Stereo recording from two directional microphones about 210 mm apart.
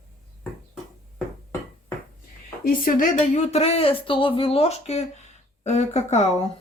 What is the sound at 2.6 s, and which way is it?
Speech, 40° left (ahead or behind).